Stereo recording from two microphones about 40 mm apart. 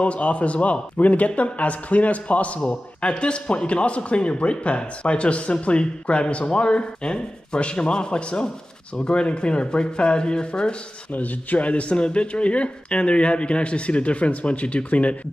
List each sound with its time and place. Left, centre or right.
0.0 s speech: left
2.7 s speech: left
11.1 s speech: left